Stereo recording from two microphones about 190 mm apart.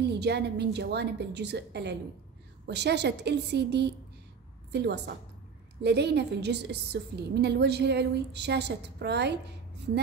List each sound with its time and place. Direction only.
0.0 s a woman's voice: 60° right (ahead or behind)